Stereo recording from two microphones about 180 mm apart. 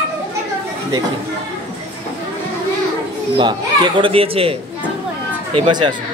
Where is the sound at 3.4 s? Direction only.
25° right (ahead or behind).